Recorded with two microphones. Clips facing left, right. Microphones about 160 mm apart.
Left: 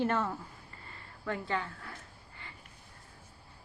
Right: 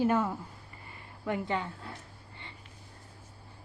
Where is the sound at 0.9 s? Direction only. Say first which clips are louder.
Right 3 dB; 15° right (ahead or behind).